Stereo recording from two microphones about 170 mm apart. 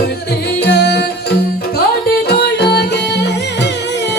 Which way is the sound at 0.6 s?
75° left (ahead or behind).